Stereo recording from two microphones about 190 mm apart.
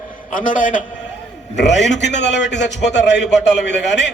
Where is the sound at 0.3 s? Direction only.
45° left (ahead or behind).